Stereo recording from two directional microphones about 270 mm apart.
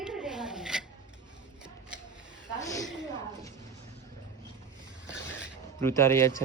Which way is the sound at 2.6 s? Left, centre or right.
Centre.